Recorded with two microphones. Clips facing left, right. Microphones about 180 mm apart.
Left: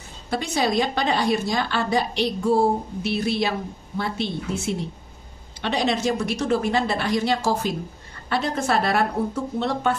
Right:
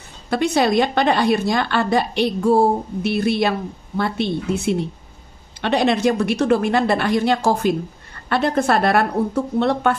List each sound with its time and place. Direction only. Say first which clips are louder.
0.3 s a woman's voice: right 6 dB; 60° right (ahead or behind)
5.6 s a woman's voice: right 6 dB; 60° right (ahead or behind)